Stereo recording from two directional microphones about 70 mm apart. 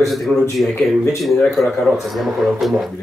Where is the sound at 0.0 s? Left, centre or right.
Centre.